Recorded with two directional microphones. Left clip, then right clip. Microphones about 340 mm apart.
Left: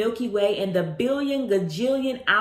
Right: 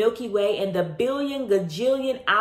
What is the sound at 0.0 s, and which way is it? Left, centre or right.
Music, centre.